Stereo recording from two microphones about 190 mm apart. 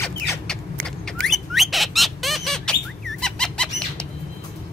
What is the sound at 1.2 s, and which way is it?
Bird, centre (ahead or behind).